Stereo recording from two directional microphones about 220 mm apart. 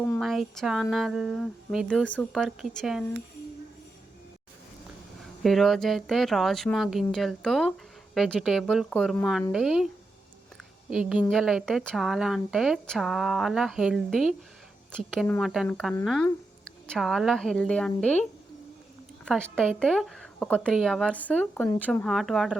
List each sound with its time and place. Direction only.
0.1 s a woman's voice: centre (ahead or behind)
5.2 s a woman's voice: centre (ahead or behind)